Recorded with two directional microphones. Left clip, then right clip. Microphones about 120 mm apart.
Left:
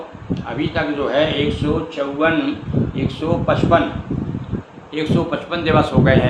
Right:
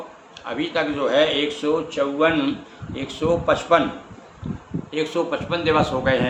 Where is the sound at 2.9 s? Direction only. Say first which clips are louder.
Right 2 dB; 40° right (ahead or behind).